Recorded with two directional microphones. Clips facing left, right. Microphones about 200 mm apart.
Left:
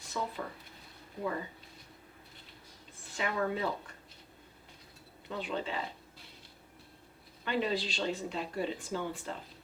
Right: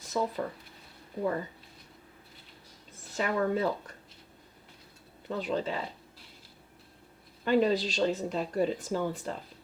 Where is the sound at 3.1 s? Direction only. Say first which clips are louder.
Right 5 dB; 40° right (ahead or behind).